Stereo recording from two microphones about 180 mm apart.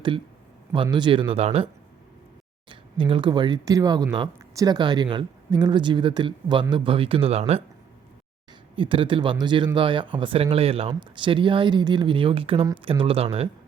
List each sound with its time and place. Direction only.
0.7 s speech: 25° right (ahead or behind)
2.6 s speech: 25° right (ahead or behind)
8.7 s speech: 30° right (ahead or behind)